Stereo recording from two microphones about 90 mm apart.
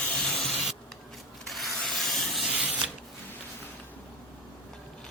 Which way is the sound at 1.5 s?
Centre (ahead or behind).